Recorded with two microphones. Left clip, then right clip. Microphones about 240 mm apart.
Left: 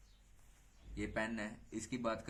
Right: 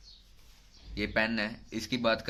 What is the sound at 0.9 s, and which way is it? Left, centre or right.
Speech, right.